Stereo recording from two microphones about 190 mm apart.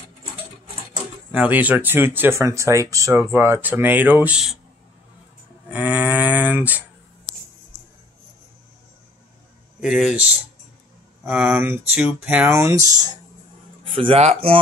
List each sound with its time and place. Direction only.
1.3 s speech: 10° right (ahead or behind)
5.7 s speech: 10° right (ahead or behind)
9.8 s speech: 5° right (ahead or behind)
13.9 s speech: 30° right (ahead or behind)